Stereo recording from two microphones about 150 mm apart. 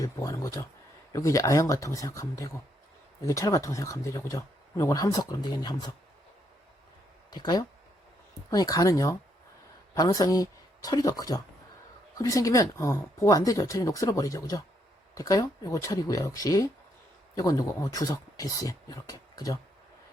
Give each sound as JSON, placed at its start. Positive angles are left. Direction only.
{"t": 0.0, "sound": "speech", "side_deg": 20}
{"t": 7.3, "sound": "speech", "side_deg": 25}